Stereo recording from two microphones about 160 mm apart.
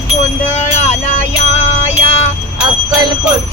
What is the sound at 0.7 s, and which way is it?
Music, 45° left (ahead or behind).